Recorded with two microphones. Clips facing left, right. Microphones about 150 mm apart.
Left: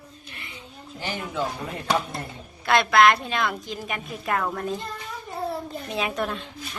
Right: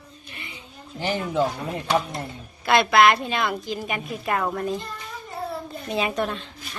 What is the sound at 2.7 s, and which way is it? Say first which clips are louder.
A woman's voice: right 1 dB; 5° right (ahead or behind).